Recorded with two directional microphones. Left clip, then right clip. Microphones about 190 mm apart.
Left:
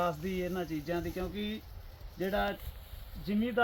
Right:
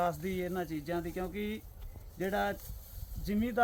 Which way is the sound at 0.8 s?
40° left (ahead or behind).